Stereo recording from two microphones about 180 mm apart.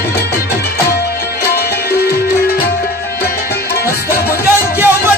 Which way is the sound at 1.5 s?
60° left (ahead or behind).